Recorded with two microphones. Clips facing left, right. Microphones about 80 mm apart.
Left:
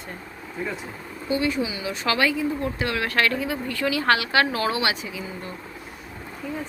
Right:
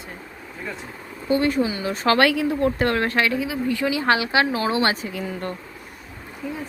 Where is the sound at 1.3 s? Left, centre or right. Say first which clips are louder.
Right 4 dB; right.